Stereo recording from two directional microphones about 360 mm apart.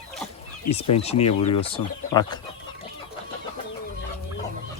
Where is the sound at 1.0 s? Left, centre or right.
Centre.